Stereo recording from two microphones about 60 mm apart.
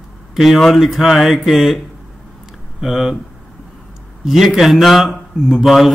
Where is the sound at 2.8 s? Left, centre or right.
Centre.